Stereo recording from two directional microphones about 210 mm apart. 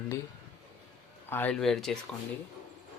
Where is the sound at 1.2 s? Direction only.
10° left (ahead or behind).